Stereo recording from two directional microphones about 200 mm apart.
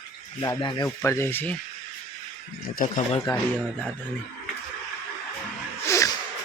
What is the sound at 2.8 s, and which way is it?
Speech, 45° left (ahead or behind).